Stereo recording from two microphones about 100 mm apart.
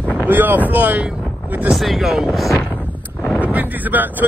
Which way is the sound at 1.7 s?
Centre (ahead or behind).